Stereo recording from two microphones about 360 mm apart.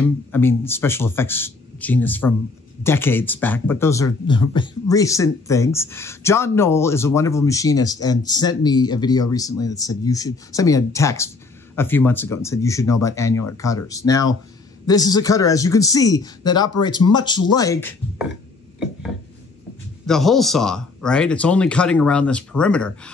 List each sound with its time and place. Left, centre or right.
0.0 s speech: centre
20.1 s speech: centre